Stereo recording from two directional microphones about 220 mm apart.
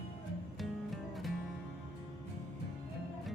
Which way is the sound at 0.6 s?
Centre (ahead or behind).